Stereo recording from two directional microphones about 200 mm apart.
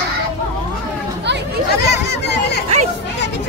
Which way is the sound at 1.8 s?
55° left (ahead or behind).